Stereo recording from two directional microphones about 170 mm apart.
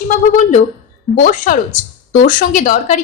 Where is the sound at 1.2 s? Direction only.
50° left (ahead or behind).